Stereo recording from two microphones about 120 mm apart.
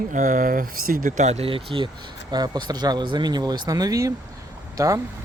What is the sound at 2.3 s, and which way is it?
Speech, 35° right (ahead or behind).